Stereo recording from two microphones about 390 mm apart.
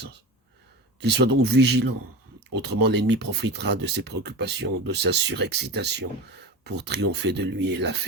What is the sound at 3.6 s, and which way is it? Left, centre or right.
Speech, right.